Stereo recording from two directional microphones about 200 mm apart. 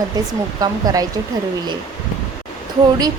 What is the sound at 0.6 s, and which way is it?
Speech, 20° right (ahead or behind).